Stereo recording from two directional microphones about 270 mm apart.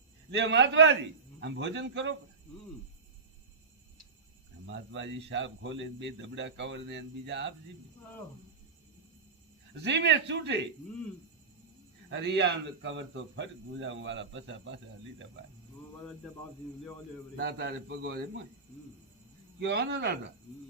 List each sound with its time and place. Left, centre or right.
0.3 s speech: right
4.6 s speech: right
9.8 s speech: right
12.1 s speech: right
17.3 s speech: right
19.5 s speech: right